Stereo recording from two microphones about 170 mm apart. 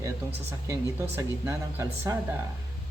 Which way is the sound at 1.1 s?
20° right (ahead or behind).